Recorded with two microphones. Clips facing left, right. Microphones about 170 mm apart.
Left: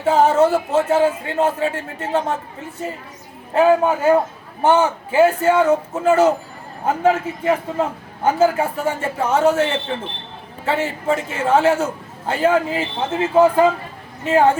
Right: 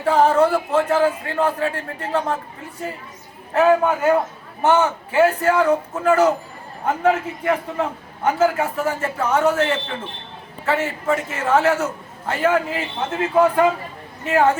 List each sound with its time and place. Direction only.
0.0 s a man's voice: 25° left (ahead or behind)
3.5 s a man's voice: 30° left (ahead or behind)